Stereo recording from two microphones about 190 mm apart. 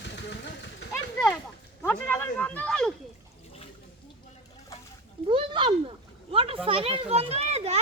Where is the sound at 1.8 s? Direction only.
10° left (ahead or behind).